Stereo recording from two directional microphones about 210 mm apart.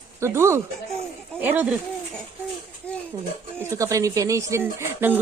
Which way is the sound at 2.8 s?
5° left (ahead or behind).